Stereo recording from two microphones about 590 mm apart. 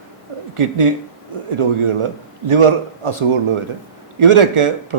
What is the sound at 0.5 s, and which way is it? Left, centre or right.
Speech, right.